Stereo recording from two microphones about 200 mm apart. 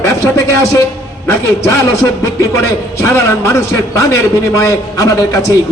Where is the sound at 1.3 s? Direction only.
15° left (ahead or behind).